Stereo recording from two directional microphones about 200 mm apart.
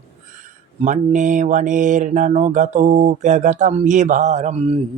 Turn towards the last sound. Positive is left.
turn(degrees=-35)  # may be behind; listen again after turning